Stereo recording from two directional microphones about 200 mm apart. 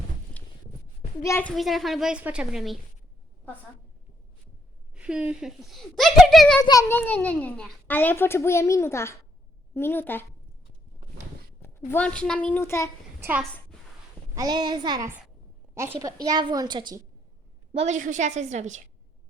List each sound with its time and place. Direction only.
1.2 s speech: 10° left (ahead or behind)
4.9 s speech: 5° right (ahead or behind)
6.6 s a child's voice: 15° left (ahead or behind)
11.9 s a child's voice: 5° left (ahead or behind)
14.3 s a woman's voice: 20° right (ahead or behind)
17.7 s a woman's voice: 35° right (ahead or behind)